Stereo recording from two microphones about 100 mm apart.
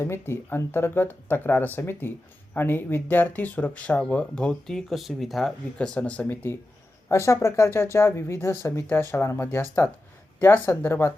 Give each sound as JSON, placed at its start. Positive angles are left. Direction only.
{"t": 0.0, "sound": "speech", "side_deg": 25}